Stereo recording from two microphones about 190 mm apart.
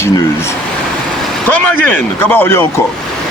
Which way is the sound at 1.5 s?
10° left (ahead or behind).